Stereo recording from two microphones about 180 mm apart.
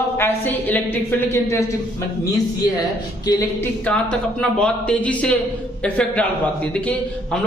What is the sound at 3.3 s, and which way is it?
Speech, 20° left (ahead or behind).